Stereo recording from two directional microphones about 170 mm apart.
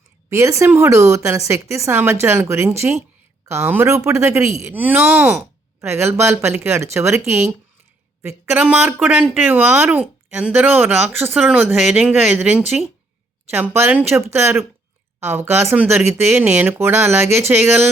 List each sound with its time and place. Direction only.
0.3 s speech: 15° right (ahead or behind)